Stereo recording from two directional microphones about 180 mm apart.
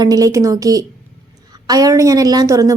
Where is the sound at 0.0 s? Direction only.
20° right (ahead or behind).